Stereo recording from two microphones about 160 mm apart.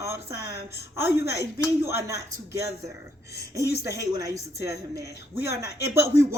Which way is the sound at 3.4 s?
20° right (ahead or behind).